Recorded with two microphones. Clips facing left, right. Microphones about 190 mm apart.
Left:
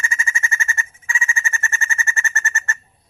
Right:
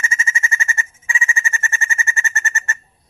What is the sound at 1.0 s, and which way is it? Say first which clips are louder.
Bird: right 2 dB; 15° right (ahead or behind).